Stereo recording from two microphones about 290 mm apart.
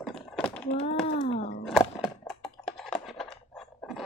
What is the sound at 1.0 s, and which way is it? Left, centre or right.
Wail, left.